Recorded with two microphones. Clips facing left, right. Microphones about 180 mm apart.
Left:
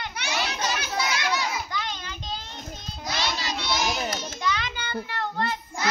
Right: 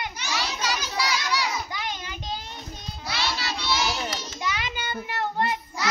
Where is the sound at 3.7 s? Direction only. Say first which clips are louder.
Even; 45° left (ahead or behind).